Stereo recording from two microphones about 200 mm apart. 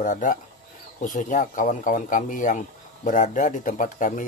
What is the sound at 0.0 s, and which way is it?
Speech, 40° left (ahead or behind).